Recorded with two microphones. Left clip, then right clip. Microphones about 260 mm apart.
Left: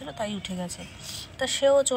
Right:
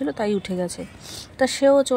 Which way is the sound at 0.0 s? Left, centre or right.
Right.